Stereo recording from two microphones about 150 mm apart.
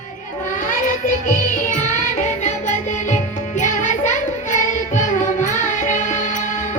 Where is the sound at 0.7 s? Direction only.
60° left (ahead or behind).